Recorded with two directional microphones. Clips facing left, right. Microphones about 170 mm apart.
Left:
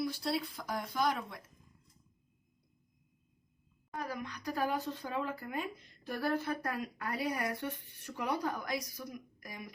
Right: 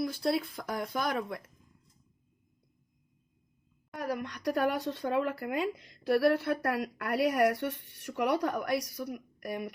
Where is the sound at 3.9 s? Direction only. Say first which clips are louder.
Right 5 dB; 70° right (ahead or behind).